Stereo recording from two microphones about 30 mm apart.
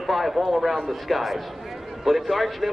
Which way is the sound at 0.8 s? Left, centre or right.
Centre.